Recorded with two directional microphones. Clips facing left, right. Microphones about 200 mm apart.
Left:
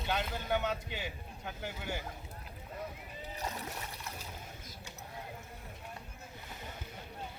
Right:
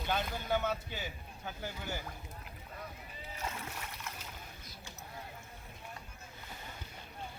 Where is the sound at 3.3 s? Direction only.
35° left (ahead or behind).